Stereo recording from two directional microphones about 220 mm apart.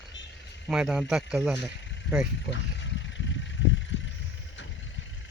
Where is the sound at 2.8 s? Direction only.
55° left (ahead or behind).